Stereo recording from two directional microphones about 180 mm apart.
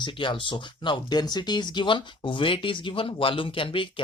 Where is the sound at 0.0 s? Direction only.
25° left (ahead or behind).